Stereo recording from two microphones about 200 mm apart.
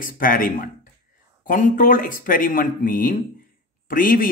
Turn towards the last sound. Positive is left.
turn(degrees=45)  # may be behind; listen again after turning